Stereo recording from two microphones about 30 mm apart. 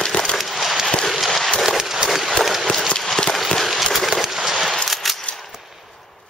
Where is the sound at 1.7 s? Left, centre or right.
Centre.